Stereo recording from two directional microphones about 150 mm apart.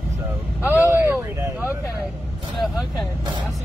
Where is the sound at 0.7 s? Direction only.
15° right (ahead or behind).